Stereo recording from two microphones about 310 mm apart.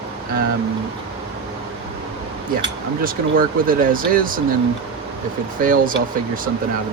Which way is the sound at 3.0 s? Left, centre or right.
Right.